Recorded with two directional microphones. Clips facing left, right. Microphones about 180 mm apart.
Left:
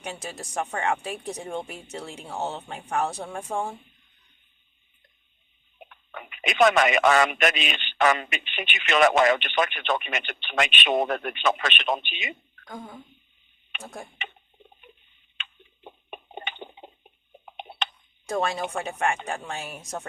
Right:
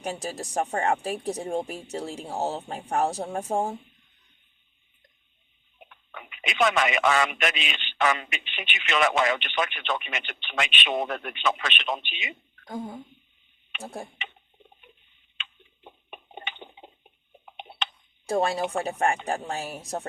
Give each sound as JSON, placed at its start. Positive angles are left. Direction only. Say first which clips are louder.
{"t": 0.0, "sound": "speech", "louder": "right 4 dB", "side_deg": -35}
{"t": 5.9, "sound": "speech", "louder": "left 3 dB", "side_deg": 50}
{"t": 13.8, "sound": "speech", "louder": "right 3 dB", "side_deg": -35}
{"t": 15.4, "sound": "tick-tock", "louder": "left 1 dB", "side_deg": 50}
{"t": 18.3, "sound": "speech", "louder": "right 2 dB", "side_deg": -35}